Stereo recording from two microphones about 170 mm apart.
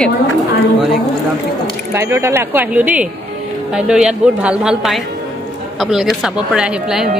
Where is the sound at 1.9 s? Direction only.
15° right (ahead or behind).